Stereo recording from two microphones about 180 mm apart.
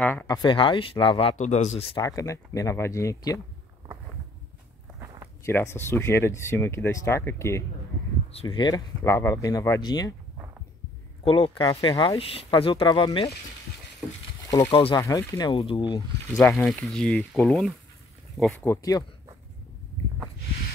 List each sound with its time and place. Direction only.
0.0 s a sound: 10° left (ahead or behind)
0.4 s speech: 25° left (ahead or behind)
1.4 s speech: 40° left (ahead or behind)
2.0 s speech: 20° left (ahead or behind)
5.4 s speech: 15° left (ahead or behind)
8.3 s speech: 30° left (ahead or behind)
11.2 s speech: 30° left (ahead or behind)
14.5 s speech: 20° left (ahead or behind)
16.3 s speech: 5° left (ahead or behind); by 19.0 s 20° left (ahead or behind)